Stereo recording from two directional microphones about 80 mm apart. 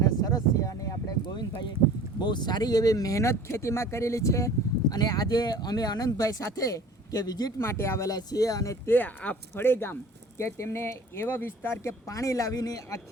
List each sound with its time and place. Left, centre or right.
0.0 s a sound: left
1.2 s a sound: left
2.1 s speech: left
4.9 s speech: left
7.6 s speech: left
8.1 s speech: left
8.9 s speech: left